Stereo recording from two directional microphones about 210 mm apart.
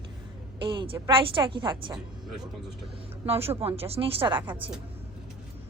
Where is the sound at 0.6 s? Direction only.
25° right (ahead or behind).